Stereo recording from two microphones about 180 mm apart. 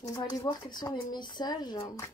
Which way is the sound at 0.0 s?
20° left (ahead or behind).